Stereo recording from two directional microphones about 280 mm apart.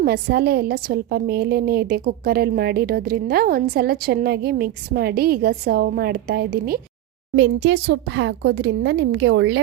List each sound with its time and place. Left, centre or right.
0.0 s a woman's voice: right